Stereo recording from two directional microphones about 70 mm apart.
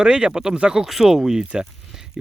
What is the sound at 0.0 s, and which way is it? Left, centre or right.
Speech, centre.